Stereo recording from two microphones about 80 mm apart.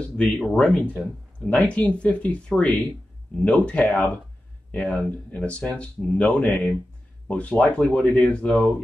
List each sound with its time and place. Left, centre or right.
0.6 s speech: centre